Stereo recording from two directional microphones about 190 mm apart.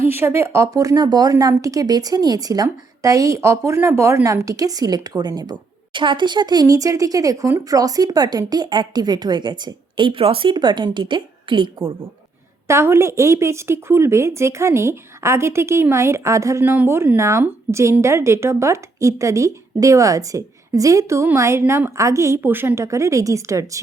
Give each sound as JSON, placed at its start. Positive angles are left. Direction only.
{"t": 0.0, "sound": "speech", "side_deg": -10}
{"t": 12.6, "sound": "a woman's voice", "side_deg": -15}